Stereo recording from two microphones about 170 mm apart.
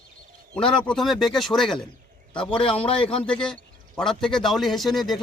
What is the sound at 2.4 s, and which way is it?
Speech, 30° left (ahead or behind).